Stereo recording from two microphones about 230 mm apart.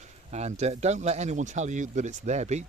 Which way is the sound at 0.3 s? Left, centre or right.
Right.